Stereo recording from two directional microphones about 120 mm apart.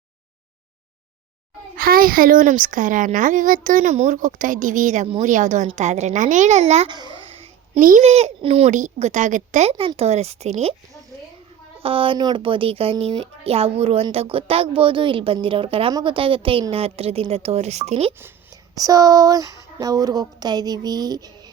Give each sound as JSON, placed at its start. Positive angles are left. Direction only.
{"t": 2.4, "sound": "a woman's voice", "side_deg": -90}
{"t": 5.7, "sound": "a woman's voice", "side_deg": -75}
{"t": 6.8, "sound": "a child's voice", "side_deg": -40}
{"t": 7.8, "sound": "speech", "side_deg": -75}
{"t": 8.7, "sound": "a woman's voice", "side_deg": -80}
{"t": 9.7, "sound": "speech", "side_deg": -55}
{"t": 11.8, "sound": "speech", "side_deg": -50}
{"t": 15.9, "sound": "a child's voice", "side_deg": -35}
{"t": 16.1, "sound": "speech", "side_deg": -45}
{"t": 18.5, "sound": "speech", "side_deg": -30}